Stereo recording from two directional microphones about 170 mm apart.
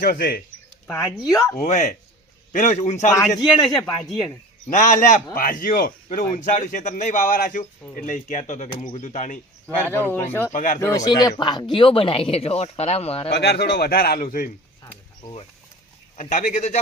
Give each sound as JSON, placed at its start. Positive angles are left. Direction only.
{"t": 0.0, "sound": "a man's voice", "side_deg": 65}
{"t": 1.2, "sound": "speech", "side_deg": 20}
{"t": 1.5, "sound": "a man's voice", "side_deg": 45}
{"t": 3.1, "sound": "speech", "side_deg": 20}
{"t": 4.7, "sound": "a man's voice", "side_deg": 50}
{"t": 9.8, "sound": "speech", "side_deg": 10}
{"t": 10.5, "sound": "a man's voice", "side_deg": 50}
{"t": 10.8, "sound": "speech", "side_deg": 20}
{"t": 13.3, "sound": "a man's voice", "side_deg": 70}
{"t": 15.2, "sound": "speech", "side_deg": 35}
{"t": 16.3, "sound": "a man's voice", "side_deg": 45}